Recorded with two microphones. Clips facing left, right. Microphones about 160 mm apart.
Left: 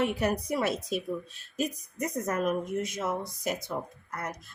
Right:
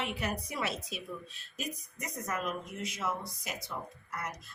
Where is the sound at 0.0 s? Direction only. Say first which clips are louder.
Left 8 dB; 40° left (ahead or behind).